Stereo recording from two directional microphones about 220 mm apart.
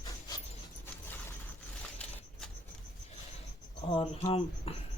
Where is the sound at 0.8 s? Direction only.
10° left (ahead or behind).